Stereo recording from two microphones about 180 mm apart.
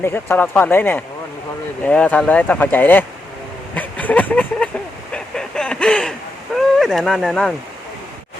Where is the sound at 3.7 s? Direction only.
10° left (ahead or behind).